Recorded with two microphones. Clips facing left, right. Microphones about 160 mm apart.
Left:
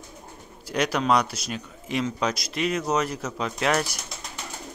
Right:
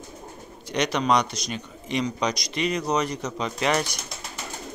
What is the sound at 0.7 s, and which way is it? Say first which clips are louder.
Speech: even; 5° left (ahead or behind).